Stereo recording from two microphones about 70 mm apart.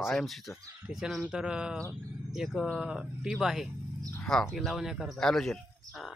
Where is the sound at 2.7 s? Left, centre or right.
Centre.